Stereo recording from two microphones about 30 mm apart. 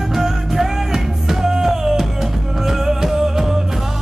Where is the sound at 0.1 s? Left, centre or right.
Centre.